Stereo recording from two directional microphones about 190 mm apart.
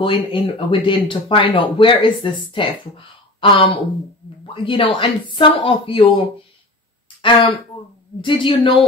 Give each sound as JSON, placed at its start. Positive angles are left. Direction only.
{"t": 0.0, "sound": "speech", "side_deg": 25}